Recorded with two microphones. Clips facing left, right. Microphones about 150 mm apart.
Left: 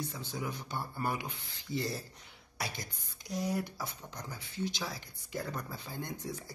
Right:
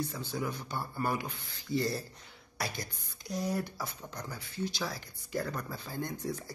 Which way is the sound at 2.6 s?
20° left (ahead or behind).